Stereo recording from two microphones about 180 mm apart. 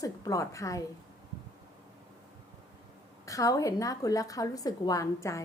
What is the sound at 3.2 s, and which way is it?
A woman's voice, 20° left (ahead or behind).